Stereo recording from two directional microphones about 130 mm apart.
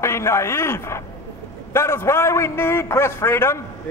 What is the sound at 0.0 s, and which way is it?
A man's voice, 20° left (ahead or behind).